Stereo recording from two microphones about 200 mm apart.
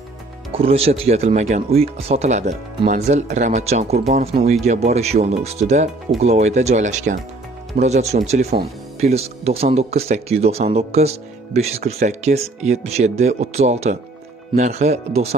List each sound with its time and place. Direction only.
0.5 s speech: 30° right (ahead or behind)